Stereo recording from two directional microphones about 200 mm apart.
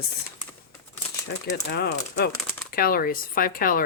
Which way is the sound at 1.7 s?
55° left (ahead or behind).